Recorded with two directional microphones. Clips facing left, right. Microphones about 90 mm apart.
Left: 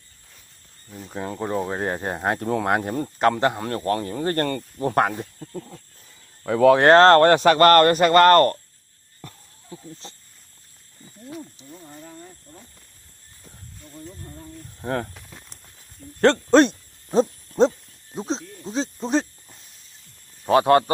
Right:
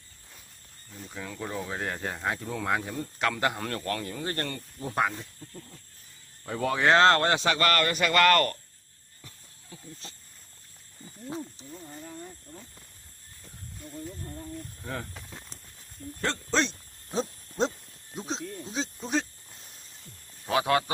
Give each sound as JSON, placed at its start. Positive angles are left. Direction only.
{"t": 1.1, "sound": "speech", "side_deg": 45}
{"t": 3.3, "sound": "speech", "side_deg": 25}
{"t": 5.4, "sound": "speech", "side_deg": 90}
{"t": 6.8, "sound": "speech", "side_deg": 45}
{"t": 9.2, "sound": "a sound", "side_deg": 60}
{"t": 9.6, "sound": "speech", "side_deg": 30}
{"t": 11.0, "sound": "speech", "side_deg": -30}
{"t": 11.7, "sound": "speech", "side_deg": 5}
{"t": 14.8, "sound": "speech", "side_deg": 55}
{"t": 15.1, "sound": "speech", "side_deg": -5}
{"t": 16.2, "sound": "speech", "side_deg": 60}
{"t": 20.4, "sound": "speech", "side_deg": 40}